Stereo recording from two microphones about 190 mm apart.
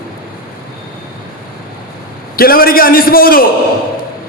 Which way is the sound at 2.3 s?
50° left (ahead or behind).